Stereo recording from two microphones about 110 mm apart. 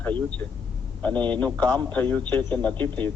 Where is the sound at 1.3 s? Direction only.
15° left (ahead or behind).